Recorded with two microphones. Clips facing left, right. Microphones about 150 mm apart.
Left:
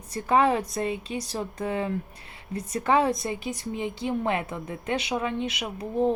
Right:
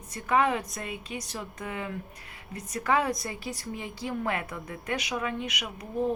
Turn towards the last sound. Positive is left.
turn(degrees=30)  # may be behind; listen again after turning